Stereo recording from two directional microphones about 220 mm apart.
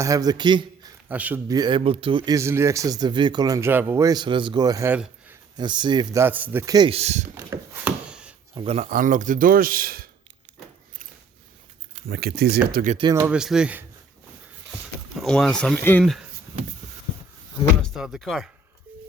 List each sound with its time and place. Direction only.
0.0 s a man's voice: 15° right (ahead or behind)
1.0 s speech: 5° right (ahead or behind)
5.5 s speech: 20° right (ahead or behind)
6.2 s speech: 10° right (ahead or behind); by 7.3 s 30° right (ahead or behind)
7.3 s chopping: 10° right (ahead or behind)
8.5 s a man's voice: 25° right (ahead or behind); by 10.1 s 40° right (ahead or behind)
12.0 s speech: 45° right (ahead or behind)
12.7 s a man's voice: 35° right (ahead or behind)
13.0 s speech: 15° right (ahead or behind)
13.3 s speech: 5° right (ahead or behind)
15.1 s speech: centre (ahead or behind)
17.8 s speech: centre (ahead or behind)